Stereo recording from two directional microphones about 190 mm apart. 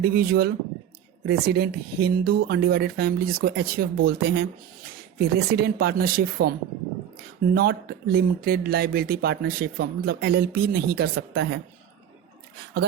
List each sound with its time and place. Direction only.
0.0 s speech: 55° right (ahead or behind)
7.5 s speech: 50° right (ahead or behind)